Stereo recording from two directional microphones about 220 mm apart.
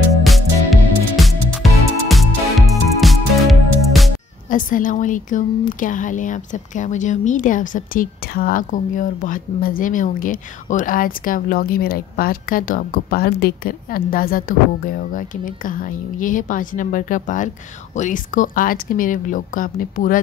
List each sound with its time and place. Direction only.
0.2 s music: centre (ahead or behind)
4.5 s a woman's voice: 35° left (ahead or behind)